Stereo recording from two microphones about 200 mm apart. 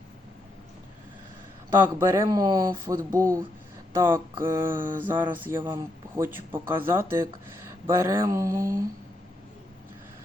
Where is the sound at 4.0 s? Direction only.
15° right (ahead or behind).